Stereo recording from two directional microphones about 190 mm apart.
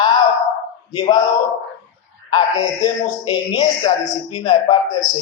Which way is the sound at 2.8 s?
20° left (ahead or behind).